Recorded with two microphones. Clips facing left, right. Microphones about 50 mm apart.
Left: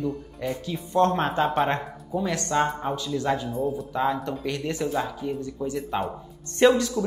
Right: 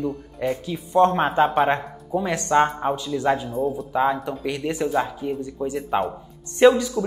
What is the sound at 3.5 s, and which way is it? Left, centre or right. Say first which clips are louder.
Speech: right 3 dB; centre.